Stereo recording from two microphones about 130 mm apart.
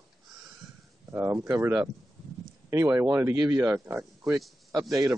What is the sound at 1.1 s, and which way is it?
Speech, 15° right (ahead or behind).